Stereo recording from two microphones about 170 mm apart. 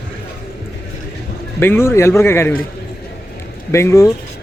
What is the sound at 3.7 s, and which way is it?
Speech, 15° left (ahead or behind).